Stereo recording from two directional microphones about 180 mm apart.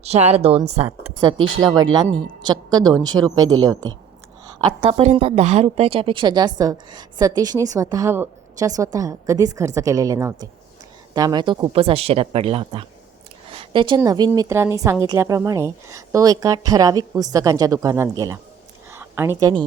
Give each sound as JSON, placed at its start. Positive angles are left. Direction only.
{"t": 0.0, "sound": "a woman's voice", "side_deg": -35}
{"t": 4.8, "sound": "a woman's voice", "side_deg": -35}
{"t": 18.9, "sound": "a sound", "side_deg": -15}